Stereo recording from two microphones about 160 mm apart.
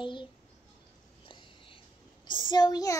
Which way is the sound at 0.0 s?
30° left (ahead or behind).